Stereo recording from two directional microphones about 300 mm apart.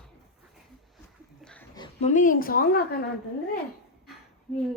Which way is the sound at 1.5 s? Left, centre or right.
Centre.